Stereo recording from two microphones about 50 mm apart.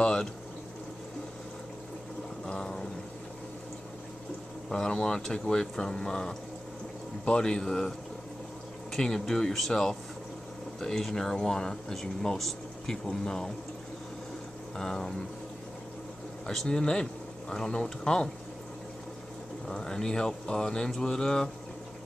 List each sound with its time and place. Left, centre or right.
0.0 s boiling: centre
2.4 s a sound: centre
4.6 s speech: centre
8.9 s speech: centre
14.8 s speech: centre
16.4 s speech: centre
19.7 s speech: centre